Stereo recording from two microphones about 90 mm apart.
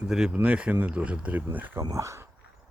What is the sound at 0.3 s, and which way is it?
Speech, 15° right (ahead or behind).